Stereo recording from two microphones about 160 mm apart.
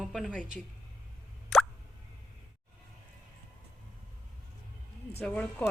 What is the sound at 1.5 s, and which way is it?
Plop, centre (ahead or behind).